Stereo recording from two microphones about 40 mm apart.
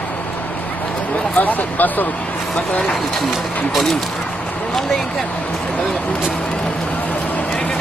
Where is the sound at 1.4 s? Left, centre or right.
Left.